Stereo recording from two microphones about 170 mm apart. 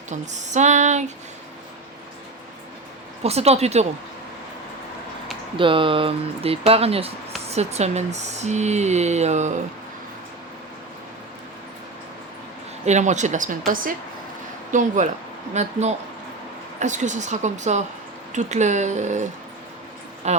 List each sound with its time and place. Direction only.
0.1 s speech: 45° right (ahead or behind)
3.2 s speech: 40° right (ahead or behind)
5.5 s speech: 30° right (ahead or behind)
12.8 s speech: 45° right (ahead or behind)
16.8 s speech: 45° right (ahead or behind)